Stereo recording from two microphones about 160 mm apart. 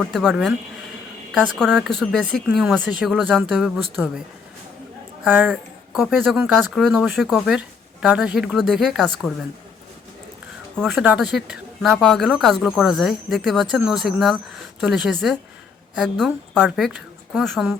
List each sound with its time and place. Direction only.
0.0 s speech: centre (ahead or behind)
5.2 s speech: 10° right (ahead or behind)
10.8 s speech: centre (ahead or behind)